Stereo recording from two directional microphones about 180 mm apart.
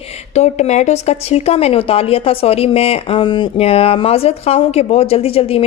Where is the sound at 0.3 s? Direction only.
40° left (ahead or behind).